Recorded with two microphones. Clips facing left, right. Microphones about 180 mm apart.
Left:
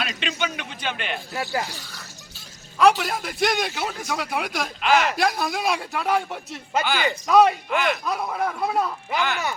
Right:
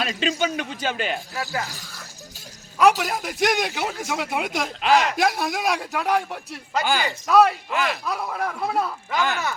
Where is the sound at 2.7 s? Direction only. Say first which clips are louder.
Even; 15° right (ahead or behind).